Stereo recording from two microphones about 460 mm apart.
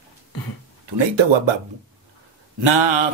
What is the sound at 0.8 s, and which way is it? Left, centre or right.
Speech, right.